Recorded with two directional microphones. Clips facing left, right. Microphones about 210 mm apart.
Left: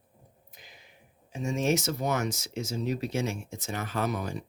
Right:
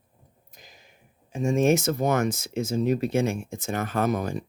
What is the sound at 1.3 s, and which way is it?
Speech, 50° right (ahead or behind).